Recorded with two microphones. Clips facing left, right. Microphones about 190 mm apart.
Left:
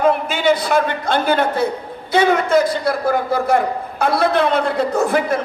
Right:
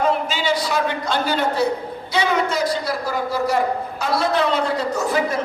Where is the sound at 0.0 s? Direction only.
55° left (ahead or behind).